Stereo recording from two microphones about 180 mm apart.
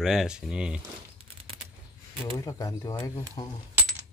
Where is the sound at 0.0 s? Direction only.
Centre (ahead or behind).